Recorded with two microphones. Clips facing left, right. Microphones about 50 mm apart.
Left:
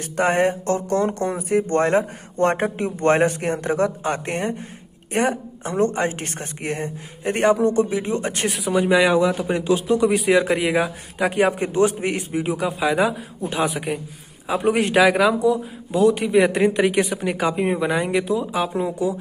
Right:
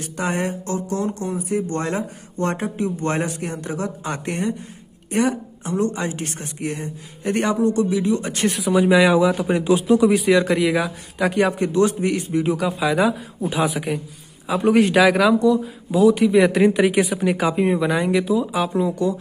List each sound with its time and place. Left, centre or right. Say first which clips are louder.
0.0 s speech: left 5 dB; left
8.5 s a man's voice: right 3 dB; centre
11.5 s speech: right 1 dB; left
12.4 s a man's voice: left 1 dB; centre